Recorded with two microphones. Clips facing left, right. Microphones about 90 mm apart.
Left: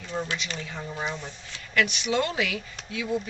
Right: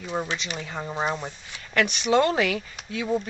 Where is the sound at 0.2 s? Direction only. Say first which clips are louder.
Even; 20° right (ahead or behind).